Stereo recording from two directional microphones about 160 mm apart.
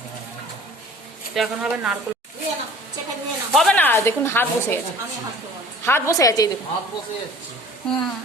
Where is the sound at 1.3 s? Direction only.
5° right (ahead or behind).